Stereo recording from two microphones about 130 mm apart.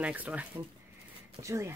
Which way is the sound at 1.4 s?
20° right (ahead or behind).